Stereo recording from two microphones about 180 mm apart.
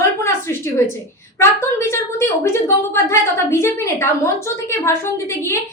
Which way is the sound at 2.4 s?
15° left (ahead or behind).